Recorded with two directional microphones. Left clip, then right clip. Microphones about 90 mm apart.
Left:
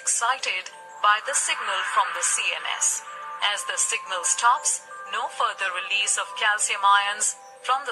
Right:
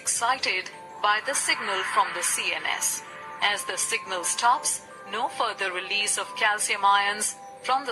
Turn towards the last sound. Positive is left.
turn(degrees=-30)  # may be behind; listen again after turning